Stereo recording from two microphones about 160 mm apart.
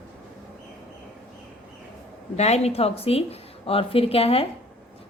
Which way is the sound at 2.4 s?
40° left (ahead or behind).